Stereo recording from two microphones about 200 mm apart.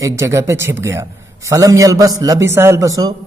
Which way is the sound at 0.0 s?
15° right (ahead or behind).